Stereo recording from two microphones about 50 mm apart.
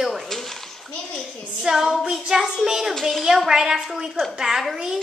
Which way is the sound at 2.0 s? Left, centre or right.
Centre.